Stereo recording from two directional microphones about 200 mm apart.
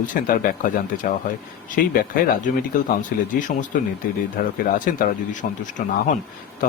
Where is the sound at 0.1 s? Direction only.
40° left (ahead or behind).